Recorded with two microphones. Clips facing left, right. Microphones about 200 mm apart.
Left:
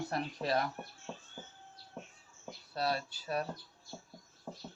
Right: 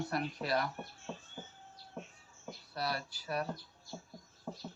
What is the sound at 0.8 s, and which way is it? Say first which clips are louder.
Speech: right 1 dB; centre (ahead or behind).